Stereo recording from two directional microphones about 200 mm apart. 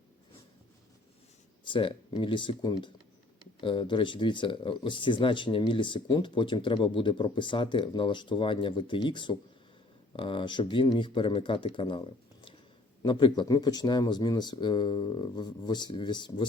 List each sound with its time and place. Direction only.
1.6 s speech: 25° left (ahead or behind)